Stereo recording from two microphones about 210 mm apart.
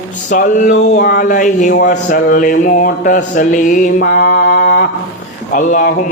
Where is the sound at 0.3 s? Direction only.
40° left (ahead or behind).